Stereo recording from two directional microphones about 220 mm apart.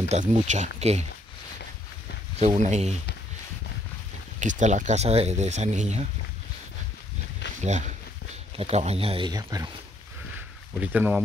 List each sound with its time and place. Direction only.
0.1 s speech: 30° right (ahead or behind)
2.3 s speech: 30° right (ahead or behind)
4.4 s speech: 35° right (ahead or behind)
7.6 s speech: 30° right (ahead or behind); by 9.7 s 15° right (ahead or behind)
10.8 s speech: 5° right (ahead or behind)